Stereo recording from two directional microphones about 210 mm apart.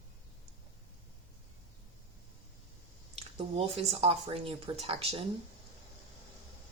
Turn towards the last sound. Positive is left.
turn(degrees=-25)  # may be behind; listen again after turning